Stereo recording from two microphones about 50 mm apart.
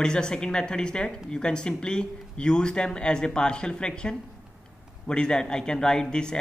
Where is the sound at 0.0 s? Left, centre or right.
Centre.